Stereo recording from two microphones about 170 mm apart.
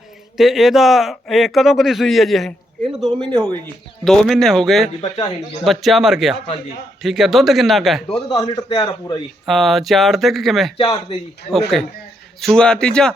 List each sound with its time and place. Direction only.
0.3 s a man's voice: centre (ahead or behind)
4.9 s a man's voice: 40° left (ahead or behind)
5.6 s a man's voice: centre (ahead or behind)
8.1 s a man's voice: 30° left (ahead or behind)
9.5 s a man's voice: centre (ahead or behind)
10.8 s a man's voice: 30° left (ahead or behind)
11.7 s a man's voice: centre (ahead or behind)